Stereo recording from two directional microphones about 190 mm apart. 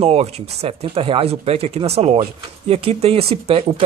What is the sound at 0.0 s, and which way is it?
Speech, 30° right (ahead or behind).